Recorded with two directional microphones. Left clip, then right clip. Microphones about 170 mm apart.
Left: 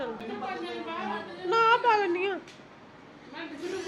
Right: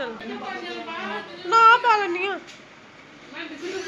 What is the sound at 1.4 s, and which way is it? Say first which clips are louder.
Speech: right 8 dB; 15° left (ahead or behind).